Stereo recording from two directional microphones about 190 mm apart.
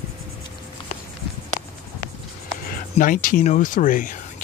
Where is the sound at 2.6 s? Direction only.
45° left (ahead or behind).